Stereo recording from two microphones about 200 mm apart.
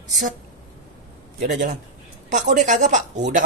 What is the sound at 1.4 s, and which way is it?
Speech, 40° right (ahead or behind).